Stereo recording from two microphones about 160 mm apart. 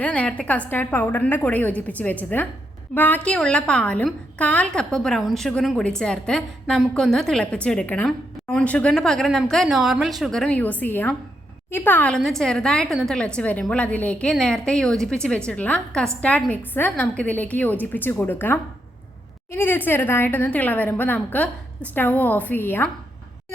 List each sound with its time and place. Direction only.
0.0 s a woman's voice: 10° left (ahead or behind)